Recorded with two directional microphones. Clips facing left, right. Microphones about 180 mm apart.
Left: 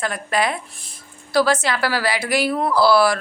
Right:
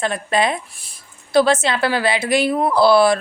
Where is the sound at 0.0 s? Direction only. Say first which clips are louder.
Right 3 dB; 25° right (ahead or behind).